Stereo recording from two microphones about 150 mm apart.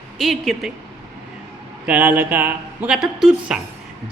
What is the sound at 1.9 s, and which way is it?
Speech, 10° right (ahead or behind).